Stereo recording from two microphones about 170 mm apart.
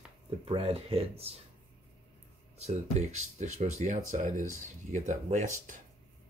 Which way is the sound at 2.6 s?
40° right (ahead or behind).